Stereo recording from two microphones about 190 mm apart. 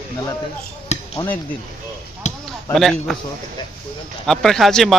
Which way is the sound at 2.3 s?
35° left (ahead or behind).